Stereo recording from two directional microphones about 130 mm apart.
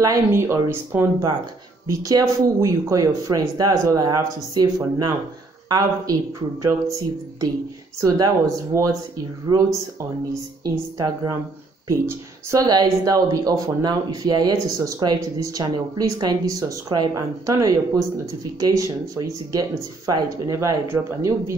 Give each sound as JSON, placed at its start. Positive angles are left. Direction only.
{"t": 0.0, "sound": "speech", "side_deg": -20}
{"t": 8.0, "sound": "speech", "side_deg": -25}